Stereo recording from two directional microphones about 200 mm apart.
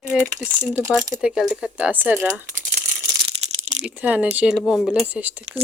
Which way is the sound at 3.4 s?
35° right (ahead or behind).